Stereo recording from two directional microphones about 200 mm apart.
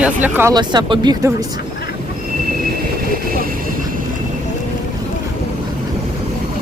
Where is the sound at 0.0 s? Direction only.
10° right (ahead or behind).